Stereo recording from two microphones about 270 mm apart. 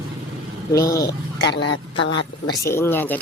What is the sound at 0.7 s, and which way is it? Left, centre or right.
Speech, centre.